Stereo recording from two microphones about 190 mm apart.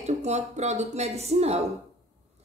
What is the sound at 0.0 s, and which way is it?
Speech, 35° right (ahead or behind).